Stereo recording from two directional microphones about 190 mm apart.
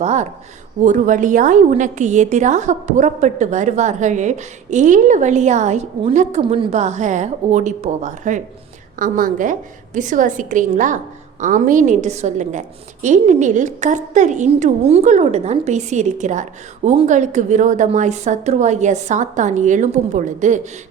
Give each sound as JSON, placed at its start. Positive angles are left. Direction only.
{"t": 0.0, "sound": "a woman's voice", "side_deg": -35}